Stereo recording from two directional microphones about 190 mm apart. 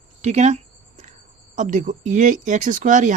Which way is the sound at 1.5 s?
40° right (ahead or behind).